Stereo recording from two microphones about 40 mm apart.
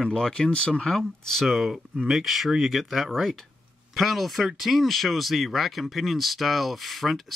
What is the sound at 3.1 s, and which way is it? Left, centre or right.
Speech, centre.